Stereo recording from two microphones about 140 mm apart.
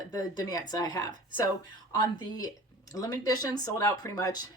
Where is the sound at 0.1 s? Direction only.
25° left (ahead or behind).